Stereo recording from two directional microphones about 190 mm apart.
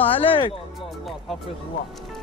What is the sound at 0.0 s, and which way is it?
Speech, 30° left (ahead or behind).